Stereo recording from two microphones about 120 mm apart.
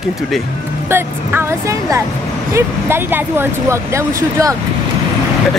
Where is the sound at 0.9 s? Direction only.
20° right (ahead or behind).